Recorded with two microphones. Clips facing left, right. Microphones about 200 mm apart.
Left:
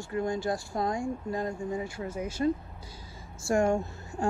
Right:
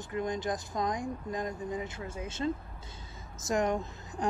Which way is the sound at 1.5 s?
25° left (ahead or behind).